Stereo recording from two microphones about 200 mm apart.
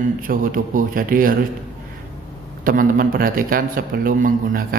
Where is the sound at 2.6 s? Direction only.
45° right (ahead or behind).